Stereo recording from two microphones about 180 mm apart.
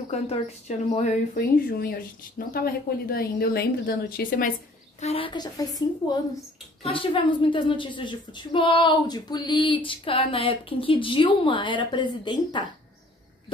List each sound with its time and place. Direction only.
0.1 s speech: 35° left (ahead or behind)
5.0 s speech: 30° left (ahead or behind)
6.8 s speech: 30° left (ahead or behind)